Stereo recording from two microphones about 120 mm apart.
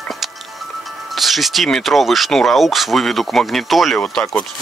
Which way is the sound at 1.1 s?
Centre (ahead or behind).